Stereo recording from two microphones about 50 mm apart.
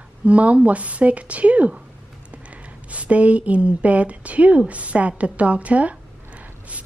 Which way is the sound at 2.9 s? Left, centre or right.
Right.